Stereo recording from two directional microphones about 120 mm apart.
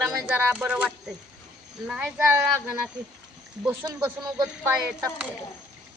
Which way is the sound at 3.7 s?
30° right (ahead or behind).